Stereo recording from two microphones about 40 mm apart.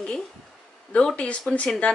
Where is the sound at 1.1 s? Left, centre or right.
Left.